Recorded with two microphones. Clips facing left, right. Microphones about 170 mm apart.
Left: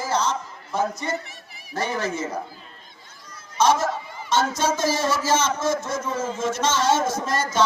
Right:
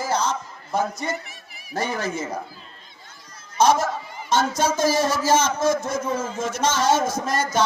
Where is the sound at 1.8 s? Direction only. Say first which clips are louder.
Even; 15° right (ahead or behind).